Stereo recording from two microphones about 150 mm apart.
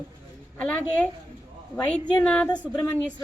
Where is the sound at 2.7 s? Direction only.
20° left (ahead or behind).